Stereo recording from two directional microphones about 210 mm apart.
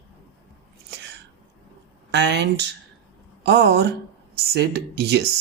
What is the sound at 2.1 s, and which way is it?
Speech, 55° right (ahead or behind).